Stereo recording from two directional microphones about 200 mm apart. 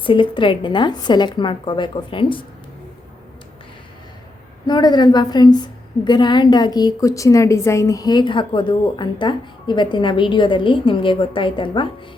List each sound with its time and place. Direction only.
0.0 s a woman's voice: 25° left (ahead or behind)
4.6 s a woman's voice: 20° left (ahead or behind)